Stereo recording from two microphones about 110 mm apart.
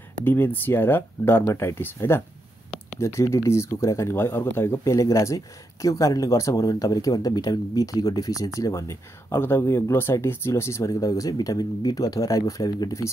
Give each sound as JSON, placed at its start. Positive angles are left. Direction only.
{"t": 0.2, "sound": "speech", "side_deg": 15}